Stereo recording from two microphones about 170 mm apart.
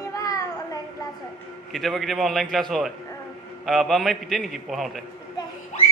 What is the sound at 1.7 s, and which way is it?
A man's voice, centre (ahead or behind).